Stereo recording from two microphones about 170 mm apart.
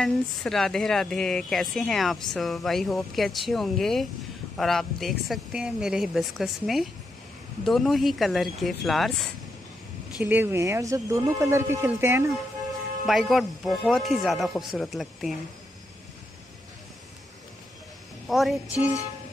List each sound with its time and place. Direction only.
0.0 s a woman's voice: centre (ahead or behind); by 12.3 s 15° right (ahead or behind)
13.0 s a woman's voice: centre (ahead or behind)
18.3 s a woman's voice: centre (ahead or behind)